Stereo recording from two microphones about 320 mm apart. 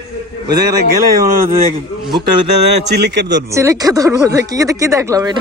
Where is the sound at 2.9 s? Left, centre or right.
Right.